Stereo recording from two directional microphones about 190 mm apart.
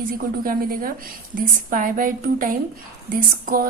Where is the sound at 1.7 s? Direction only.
45° right (ahead or behind).